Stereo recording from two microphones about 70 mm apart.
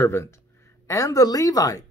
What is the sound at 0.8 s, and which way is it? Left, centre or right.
A woman's voice, left.